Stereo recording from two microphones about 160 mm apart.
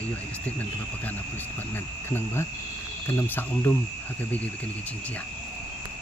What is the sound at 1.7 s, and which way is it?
Speech, 15° left (ahead or behind).